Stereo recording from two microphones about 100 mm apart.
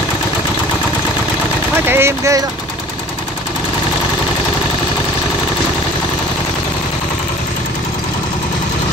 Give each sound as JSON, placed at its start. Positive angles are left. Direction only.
{"t": 1.9, "sound": "speech", "side_deg": -25}